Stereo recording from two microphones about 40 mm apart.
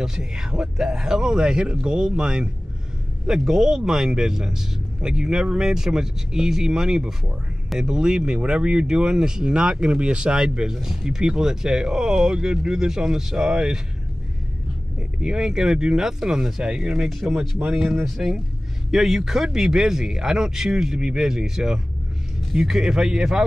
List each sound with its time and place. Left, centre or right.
0.0 s speech: centre
15.2 s speech: centre
17.1 s speech: centre